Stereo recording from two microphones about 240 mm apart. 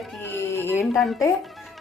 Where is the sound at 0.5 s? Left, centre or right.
Centre.